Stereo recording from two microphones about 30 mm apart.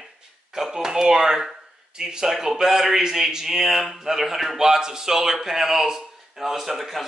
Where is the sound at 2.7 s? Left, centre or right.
Centre.